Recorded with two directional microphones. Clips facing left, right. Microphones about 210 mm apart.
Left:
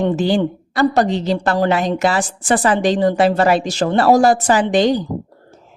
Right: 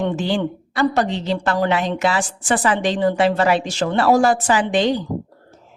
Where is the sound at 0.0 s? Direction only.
40° left (ahead or behind).